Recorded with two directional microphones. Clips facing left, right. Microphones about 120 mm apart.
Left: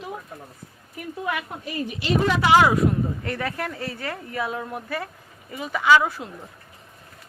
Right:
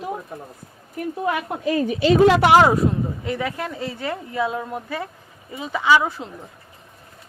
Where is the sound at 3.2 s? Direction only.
15° right (ahead or behind).